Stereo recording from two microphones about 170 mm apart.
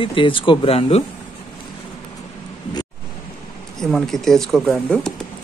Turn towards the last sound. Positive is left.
turn(degrees=0)  # may be behind; listen again after turning